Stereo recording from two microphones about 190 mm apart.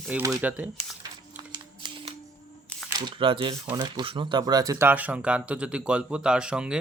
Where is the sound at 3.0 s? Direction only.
25° right (ahead or behind); by 6.7 s 5° right (ahead or behind).